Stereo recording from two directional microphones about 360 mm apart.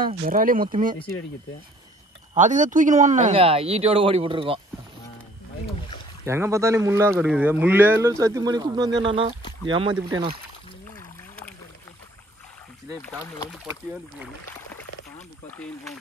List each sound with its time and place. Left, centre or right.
0.2 s speech: right
2.3 s speech: centre
6.2 s speech: centre
13.0 s speech: centre
15.5 s speech: centre